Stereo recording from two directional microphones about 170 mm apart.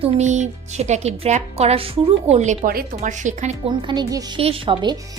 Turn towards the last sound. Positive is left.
turn(degrees=-30)  # may be behind; listen again after turning